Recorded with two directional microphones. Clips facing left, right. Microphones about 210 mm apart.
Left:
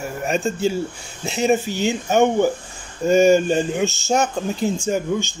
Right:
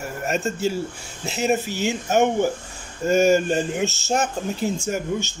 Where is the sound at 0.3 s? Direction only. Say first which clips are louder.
Left 3 dB; 5° right (ahead or behind).